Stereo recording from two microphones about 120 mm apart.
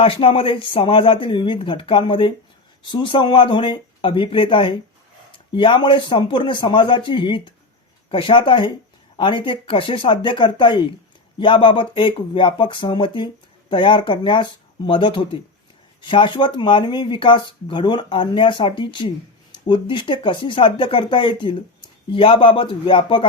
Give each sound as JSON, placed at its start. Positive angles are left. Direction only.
{"t": 0.0, "sound": "speech", "side_deg": 50}